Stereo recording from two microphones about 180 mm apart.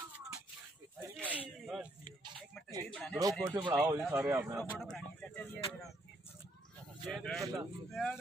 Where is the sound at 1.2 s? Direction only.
10° right (ahead or behind).